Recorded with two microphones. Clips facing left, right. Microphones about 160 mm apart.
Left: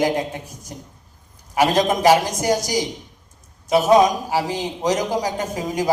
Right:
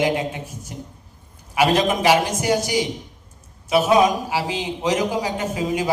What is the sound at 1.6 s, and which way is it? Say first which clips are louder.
Speech: left 1 dB; 40° left (ahead or behind).